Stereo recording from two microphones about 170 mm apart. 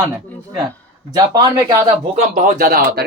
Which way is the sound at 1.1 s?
20° right (ahead or behind).